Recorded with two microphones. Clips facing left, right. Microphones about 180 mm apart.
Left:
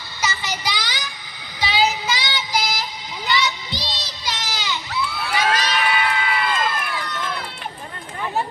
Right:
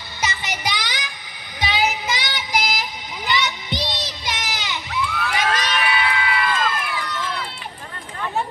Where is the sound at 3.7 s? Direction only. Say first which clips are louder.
Right 4 dB; 20° right (ahead or behind).